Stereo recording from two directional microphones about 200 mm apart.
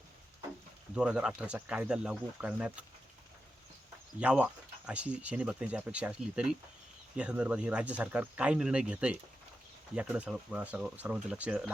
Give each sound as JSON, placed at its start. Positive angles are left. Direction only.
{"t": 0.9, "sound": "speech", "side_deg": -5}
{"t": 4.2, "sound": "speech", "side_deg": -5}